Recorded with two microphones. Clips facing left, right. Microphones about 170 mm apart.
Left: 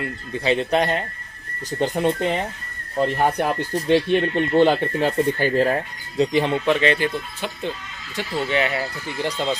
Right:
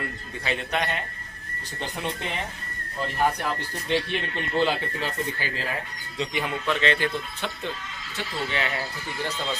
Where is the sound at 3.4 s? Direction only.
55° left (ahead or behind).